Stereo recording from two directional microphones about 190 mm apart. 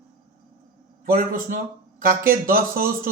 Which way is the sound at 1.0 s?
50° right (ahead or behind).